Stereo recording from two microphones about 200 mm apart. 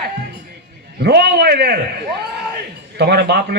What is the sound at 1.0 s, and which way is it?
A man's voice, 55° right (ahead or behind).